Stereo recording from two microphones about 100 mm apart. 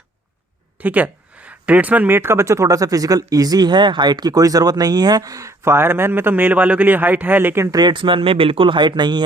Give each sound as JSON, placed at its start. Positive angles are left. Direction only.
{"t": 0.8, "sound": "speech", "side_deg": -15}
{"t": 7.7, "sound": "speech", "side_deg": -45}